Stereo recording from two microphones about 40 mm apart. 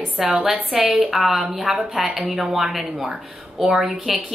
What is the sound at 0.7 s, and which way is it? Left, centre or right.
Speech, right.